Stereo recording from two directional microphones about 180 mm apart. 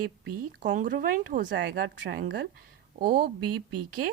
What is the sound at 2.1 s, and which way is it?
A woman's voice, 60° right (ahead or behind).